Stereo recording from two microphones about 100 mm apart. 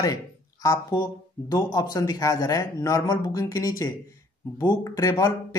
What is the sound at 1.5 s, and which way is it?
Speech, 40° left (ahead or behind).